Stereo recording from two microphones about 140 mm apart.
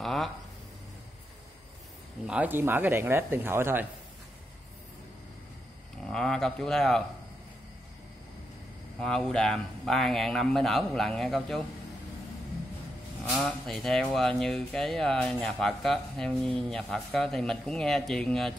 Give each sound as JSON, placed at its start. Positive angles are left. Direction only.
{"t": 0.0, "sound": "a sound", "side_deg": 0}
{"t": 2.2, "sound": "speech", "side_deg": -10}
{"t": 6.0, "sound": "speech", "side_deg": 5}
{"t": 9.0, "sound": "speech", "side_deg": 5}
{"t": 13.5, "sound": "speech", "side_deg": 0}